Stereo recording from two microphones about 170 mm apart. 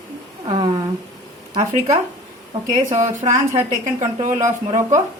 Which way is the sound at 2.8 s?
45° right (ahead or behind).